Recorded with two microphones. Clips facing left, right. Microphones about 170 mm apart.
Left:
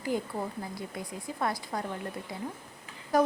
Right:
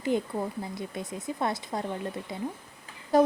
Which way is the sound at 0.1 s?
20° right (ahead or behind).